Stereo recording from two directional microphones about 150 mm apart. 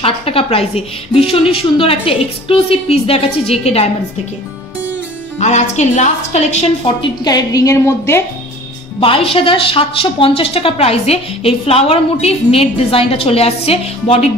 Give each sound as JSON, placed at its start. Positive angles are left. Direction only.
{"t": 0.0, "sound": "a woman's voice", "side_deg": 40}
{"t": 5.4, "sound": "a woman's voice", "side_deg": 50}
{"t": 7.0, "sound": "a woman's voice", "side_deg": 25}
{"t": 9.0, "sound": "a woman's voice", "side_deg": 40}